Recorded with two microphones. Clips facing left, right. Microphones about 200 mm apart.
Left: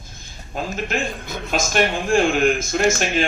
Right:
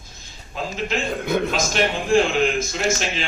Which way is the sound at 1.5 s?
50° left (ahead or behind).